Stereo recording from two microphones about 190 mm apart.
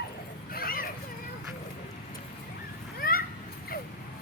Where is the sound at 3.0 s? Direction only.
50° left (ahead or behind).